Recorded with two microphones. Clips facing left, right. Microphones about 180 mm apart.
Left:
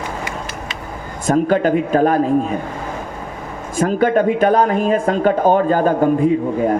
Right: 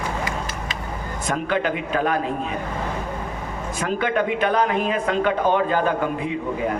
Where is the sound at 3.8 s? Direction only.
40° left (ahead or behind).